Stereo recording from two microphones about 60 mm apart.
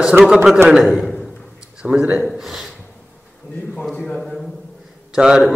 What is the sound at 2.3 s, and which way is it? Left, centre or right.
Speech, centre.